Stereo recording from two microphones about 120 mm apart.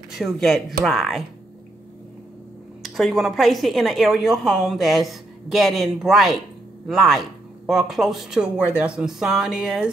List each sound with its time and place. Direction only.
0.1 s a woman's voice: centre (ahead or behind)
2.8 s a woman's voice: centre (ahead or behind)